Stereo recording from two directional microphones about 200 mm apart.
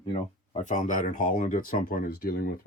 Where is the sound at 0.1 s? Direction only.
35° left (ahead or behind).